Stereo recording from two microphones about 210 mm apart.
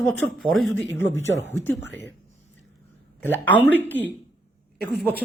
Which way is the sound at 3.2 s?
10° left (ahead or behind).